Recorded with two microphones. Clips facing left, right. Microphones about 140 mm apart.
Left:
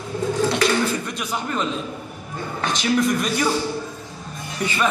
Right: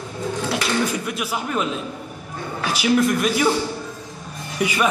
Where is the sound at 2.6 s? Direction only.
5° right (ahead or behind).